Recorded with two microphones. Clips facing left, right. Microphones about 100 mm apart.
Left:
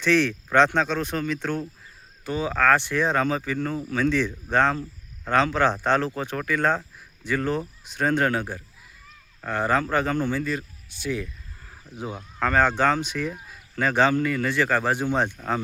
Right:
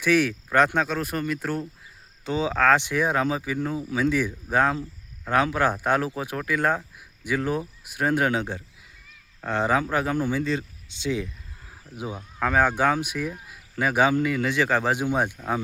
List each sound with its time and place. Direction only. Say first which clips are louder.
0.0 s speech: even; 10° right (ahead or behind)
2.2 s speech: right 1 dB; 20° right (ahead or behind)
10.4 s speech: right 2 dB; 20° right (ahead or behind)
11.9 s speech: even; 10° right (ahead or behind)